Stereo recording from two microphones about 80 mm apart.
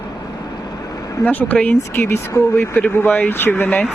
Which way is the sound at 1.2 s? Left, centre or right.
Left.